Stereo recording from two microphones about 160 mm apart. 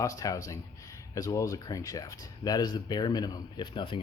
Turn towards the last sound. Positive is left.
turn(degrees=30)  # may be behind; listen again after turning